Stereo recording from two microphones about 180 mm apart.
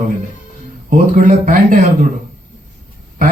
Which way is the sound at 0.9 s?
45° right (ahead or behind).